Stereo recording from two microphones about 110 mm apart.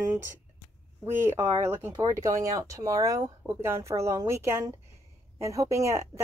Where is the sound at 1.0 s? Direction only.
25° right (ahead or behind).